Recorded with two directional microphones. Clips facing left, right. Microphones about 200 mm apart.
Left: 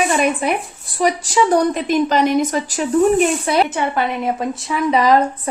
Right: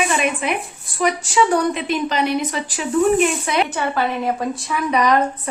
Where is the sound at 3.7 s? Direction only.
20° left (ahead or behind).